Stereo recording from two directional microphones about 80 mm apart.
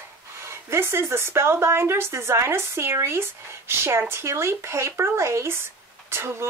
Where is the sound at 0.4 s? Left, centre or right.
Right.